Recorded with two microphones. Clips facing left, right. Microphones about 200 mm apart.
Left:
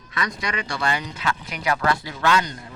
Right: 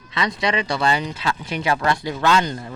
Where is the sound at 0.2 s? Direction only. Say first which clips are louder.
Right 6 dB; 25° right (ahead or behind).